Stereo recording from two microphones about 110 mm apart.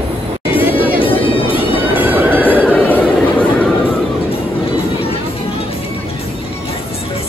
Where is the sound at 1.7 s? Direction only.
15° right (ahead or behind).